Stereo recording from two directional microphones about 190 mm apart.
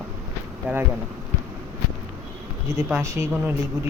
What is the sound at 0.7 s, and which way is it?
Speech, 5° right (ahead or behind).